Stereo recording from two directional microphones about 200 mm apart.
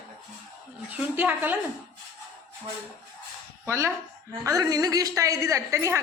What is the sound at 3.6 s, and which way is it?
A woman's voice, 15° right (ahead or behind).